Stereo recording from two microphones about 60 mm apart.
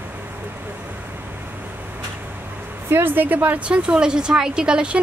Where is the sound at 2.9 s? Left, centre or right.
Right.